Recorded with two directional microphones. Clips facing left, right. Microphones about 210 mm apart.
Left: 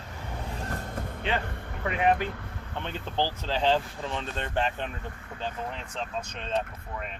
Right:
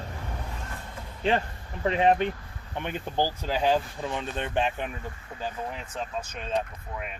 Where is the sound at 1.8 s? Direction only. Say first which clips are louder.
Right 3 dB; 25° right (ahead or behind).